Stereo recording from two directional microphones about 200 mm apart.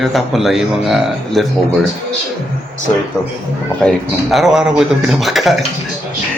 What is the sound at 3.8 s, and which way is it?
A man's voice, centre (ahead or behind).